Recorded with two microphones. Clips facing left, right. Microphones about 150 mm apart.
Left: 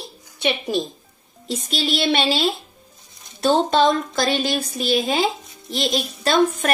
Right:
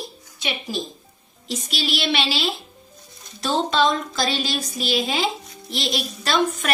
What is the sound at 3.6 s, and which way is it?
A woman's voice, 50° left (ahead or behind).